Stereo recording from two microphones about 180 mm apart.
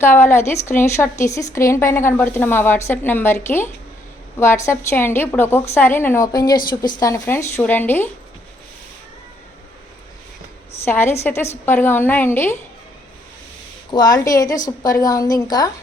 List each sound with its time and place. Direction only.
0.0 s a woman's voice: 10° left (ahead or behind)
10.8 s a woman's voice: 15° left (ahead or behind)
13.9 s a woman's voice: 20° left (ahead or behind)